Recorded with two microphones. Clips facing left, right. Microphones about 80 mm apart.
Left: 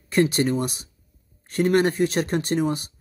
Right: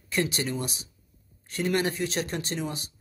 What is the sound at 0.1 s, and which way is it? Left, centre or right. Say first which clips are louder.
Speech: left 8 dB; left.